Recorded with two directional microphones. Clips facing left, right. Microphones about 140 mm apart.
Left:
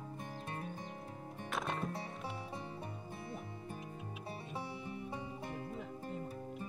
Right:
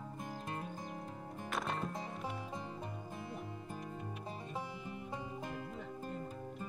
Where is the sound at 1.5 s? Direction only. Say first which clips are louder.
Even; centre (ahead or behind).